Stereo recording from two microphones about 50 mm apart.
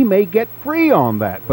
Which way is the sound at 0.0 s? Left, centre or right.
Right.